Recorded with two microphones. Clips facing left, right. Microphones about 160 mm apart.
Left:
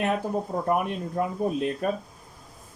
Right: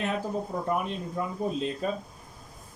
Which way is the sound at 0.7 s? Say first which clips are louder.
Left 5 dB; 55° left (ahead or behind).